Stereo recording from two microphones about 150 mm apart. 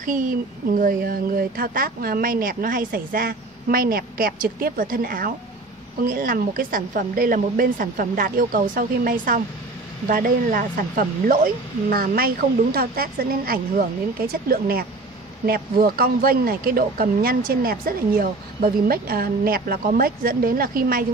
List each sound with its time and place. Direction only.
0.0 s a woman's voice: 65° right (ahead or behind)